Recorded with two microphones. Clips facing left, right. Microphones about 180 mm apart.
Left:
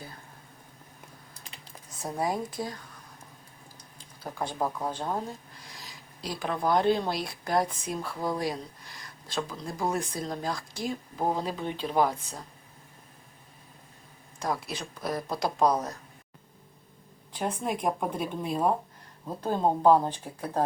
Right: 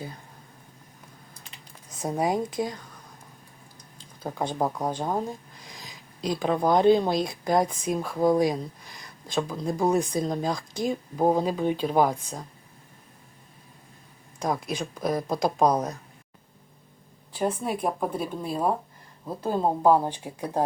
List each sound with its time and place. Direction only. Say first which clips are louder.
2.0 s speech: right 5 dB; 20° right (ahead or behind)
4.2 s speech: right 4 dB; 20° right (ahead or behind)
14.3 s speech: right 4 dB; 15° right (ahead or behind)
17.3 s speech: right 3 dB; 5° right (ahead or behind)